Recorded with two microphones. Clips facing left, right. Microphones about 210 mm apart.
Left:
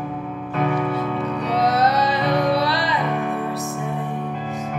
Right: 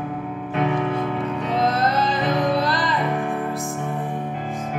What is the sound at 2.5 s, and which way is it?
Music, 50° right (ahead or behind).